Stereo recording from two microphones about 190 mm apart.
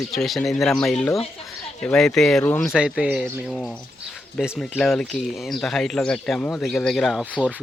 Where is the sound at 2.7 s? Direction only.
5° right (ahead or behind).